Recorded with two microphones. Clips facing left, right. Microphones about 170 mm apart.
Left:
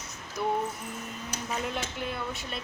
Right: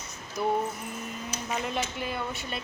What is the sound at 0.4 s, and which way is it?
Speech, 5° right (ahead or behind).